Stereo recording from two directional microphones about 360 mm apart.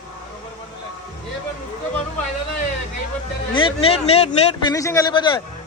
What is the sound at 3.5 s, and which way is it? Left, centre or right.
A man's voice, centre.